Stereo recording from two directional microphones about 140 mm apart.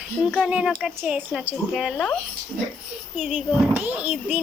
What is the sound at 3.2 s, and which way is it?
A child's voice, 10° right (ahead or behind).